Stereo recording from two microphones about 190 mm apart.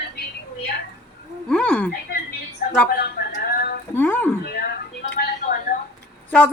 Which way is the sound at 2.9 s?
55° left (ahead or behind).